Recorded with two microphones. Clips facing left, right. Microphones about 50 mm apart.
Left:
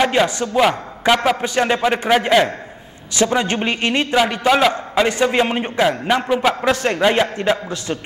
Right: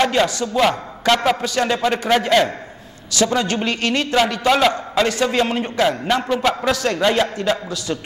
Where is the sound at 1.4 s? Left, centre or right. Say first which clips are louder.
Left 2 dB; left.